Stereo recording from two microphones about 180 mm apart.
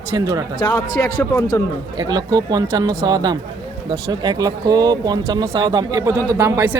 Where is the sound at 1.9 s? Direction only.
20° right (ahead or behind).